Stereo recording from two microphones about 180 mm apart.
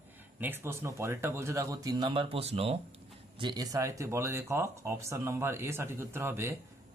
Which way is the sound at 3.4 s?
20° right (ahead or behind).